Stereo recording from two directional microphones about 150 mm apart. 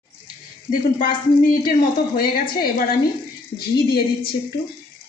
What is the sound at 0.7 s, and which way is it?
Speech, 65° left (ahead or behind).